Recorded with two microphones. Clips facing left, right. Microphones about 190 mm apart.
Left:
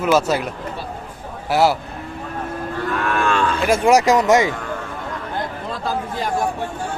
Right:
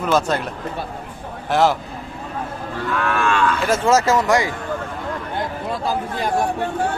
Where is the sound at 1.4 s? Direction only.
10° left (ahead or behind).